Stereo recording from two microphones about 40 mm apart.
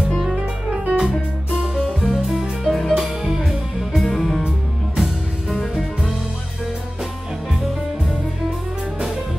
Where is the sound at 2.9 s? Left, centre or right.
Centre.